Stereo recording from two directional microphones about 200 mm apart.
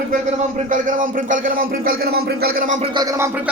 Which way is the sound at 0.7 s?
40° right (ahead or behind).